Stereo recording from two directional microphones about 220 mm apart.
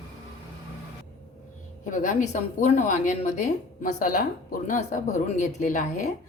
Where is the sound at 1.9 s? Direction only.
35° left (ahead or behind).